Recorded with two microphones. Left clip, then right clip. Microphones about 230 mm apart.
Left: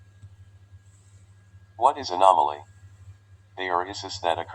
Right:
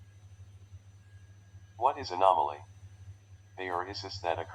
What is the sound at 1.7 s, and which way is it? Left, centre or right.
Speech, left.